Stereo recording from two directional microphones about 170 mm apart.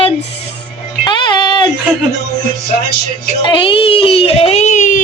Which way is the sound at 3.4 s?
30° left (ahead or behind).